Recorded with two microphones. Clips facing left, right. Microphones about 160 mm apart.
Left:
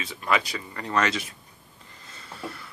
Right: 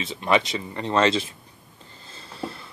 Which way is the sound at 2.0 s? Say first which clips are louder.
Right 3 dB; 30° right (ahead or behind).